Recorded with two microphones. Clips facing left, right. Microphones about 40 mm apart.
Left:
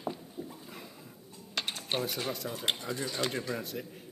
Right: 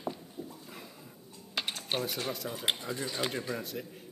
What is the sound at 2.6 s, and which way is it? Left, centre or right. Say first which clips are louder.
Speech: even; centre.